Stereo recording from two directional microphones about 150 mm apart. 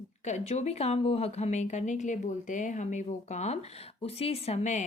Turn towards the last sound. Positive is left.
turn(degrees=50)  # may be behind; listen again after turning